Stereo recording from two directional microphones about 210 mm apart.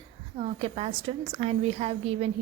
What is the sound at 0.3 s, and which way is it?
A woman's voice, 30° right (ahead or behind).